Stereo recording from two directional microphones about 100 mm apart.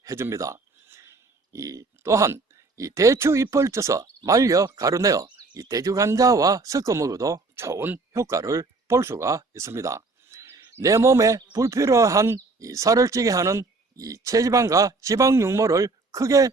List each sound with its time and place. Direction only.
0.0 s speech: 30° right (ahead or behind)